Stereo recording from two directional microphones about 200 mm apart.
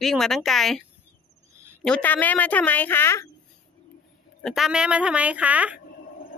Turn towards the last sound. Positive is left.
turn(degrees=-5)  # may be behind; listen again after turning